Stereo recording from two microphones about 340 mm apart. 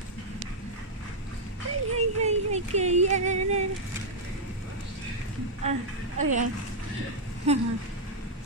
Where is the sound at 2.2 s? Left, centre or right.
Centre.